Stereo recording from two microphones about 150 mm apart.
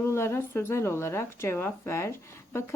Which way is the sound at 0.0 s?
20° left (ahead or behind).